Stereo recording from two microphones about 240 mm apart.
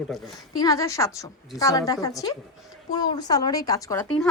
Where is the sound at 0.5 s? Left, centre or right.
Centre.